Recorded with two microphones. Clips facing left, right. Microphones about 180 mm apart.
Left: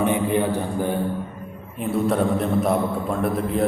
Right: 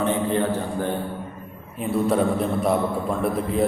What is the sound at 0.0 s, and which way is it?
Speech, 15° left (ahead or behind).